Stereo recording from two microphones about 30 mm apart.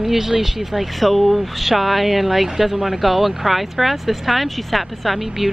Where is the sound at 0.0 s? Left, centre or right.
Centre.